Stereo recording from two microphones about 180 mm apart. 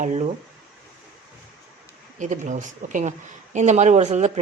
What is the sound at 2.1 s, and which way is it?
A woman's voice, 45° right (ahead or behind).